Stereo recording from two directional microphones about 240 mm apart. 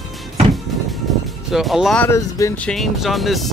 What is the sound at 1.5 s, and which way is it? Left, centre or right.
Speech, centre.